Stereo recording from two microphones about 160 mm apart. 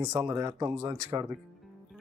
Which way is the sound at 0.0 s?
15° right (ahead or behind).